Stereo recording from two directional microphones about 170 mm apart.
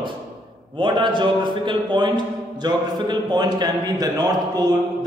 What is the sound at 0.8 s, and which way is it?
A man's voice, 25° right (ahead or behind).